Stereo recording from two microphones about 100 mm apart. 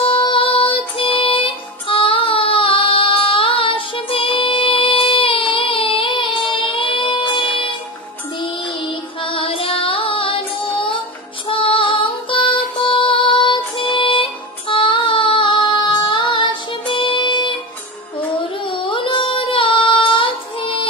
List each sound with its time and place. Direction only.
0.0 s music: 55° left (ahead or behind)
8.4 s child singing: 60° left (ahead or behind)
11.4 s music: 60° left (ahead or behind)
14.7 s child singing: 60° left (ahead or behind)
18.6 s child singing: 60° left (ahead or behind)